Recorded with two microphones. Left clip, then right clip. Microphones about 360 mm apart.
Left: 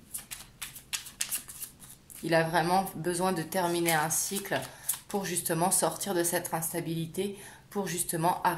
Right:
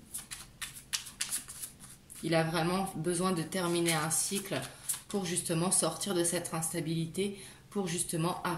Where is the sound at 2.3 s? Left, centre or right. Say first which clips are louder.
Left 5 dB; centre.